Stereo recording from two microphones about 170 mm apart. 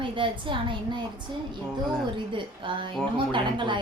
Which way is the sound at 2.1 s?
30° right (ahead or behind).